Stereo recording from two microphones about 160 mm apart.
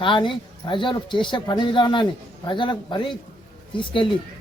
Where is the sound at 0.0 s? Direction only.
30° left (ahead or behind).